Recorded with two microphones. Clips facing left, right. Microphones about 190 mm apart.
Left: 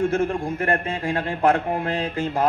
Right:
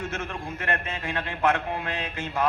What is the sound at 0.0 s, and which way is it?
A man's voice, 30° left (ahead or behind).